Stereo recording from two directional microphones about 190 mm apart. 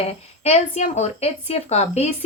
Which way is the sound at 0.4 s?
35° left (ahead or behind).